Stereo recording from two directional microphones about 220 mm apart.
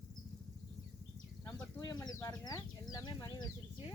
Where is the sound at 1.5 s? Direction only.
15° left (ahead or behind).